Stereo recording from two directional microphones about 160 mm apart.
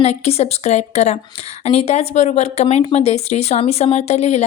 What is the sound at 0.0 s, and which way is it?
A woman's voice, 40° left (ahead or behind).